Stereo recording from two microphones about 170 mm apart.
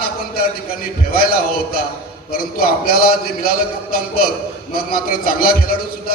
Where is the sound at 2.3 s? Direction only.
60° left (ahead or behind).